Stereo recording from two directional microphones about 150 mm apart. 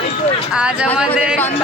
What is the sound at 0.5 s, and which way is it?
Speech, 5° right (ahead or behind).